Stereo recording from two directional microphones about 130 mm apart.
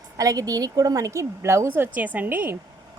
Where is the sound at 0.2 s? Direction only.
25° right (ahead or behind).